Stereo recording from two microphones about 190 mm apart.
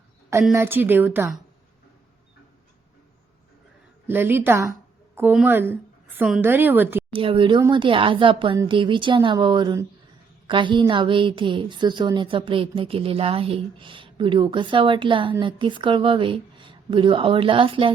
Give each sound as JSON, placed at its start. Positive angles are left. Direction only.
{"t": 0.5, "sound": "a woman's voice", "side_deg": -10}
{"t": 4.0, "sound": "a woman's voice", "side_deg": -10}
{"t": 7.1, "sound": "a woman's voice", "side_deg": -25}